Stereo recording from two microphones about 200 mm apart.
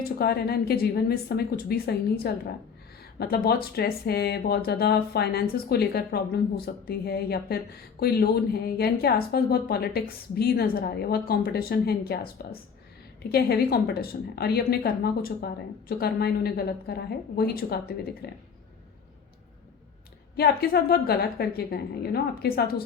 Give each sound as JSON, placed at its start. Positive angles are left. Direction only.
{"t": 0.2, "sound": "a woman's voice", "side_deg": 50}
{"t": 20.3, "sound": "a woman's voice", "side_deg": 50}